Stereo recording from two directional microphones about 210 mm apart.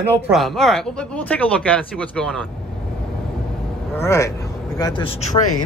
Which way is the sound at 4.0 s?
15° left (ahead or behind).